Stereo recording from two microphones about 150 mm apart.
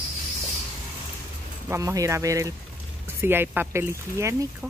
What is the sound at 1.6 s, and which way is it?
Speech, 20° right (ahead or behind).